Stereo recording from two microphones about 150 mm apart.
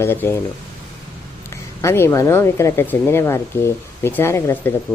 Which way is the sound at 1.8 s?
15° left (ahead or behind).